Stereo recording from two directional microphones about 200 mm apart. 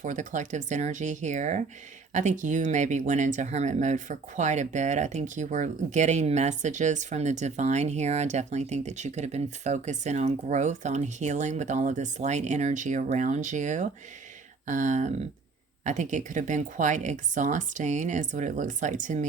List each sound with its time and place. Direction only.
0.0 s speech: 35° right (ahead or behind)